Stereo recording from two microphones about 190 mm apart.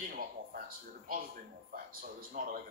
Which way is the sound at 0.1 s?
50° right (ahead or behind).